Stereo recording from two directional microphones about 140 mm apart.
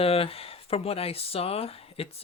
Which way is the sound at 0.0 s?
45° left (ahead or behind).